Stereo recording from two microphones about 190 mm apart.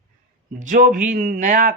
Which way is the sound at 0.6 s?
45° right (ahead or behind).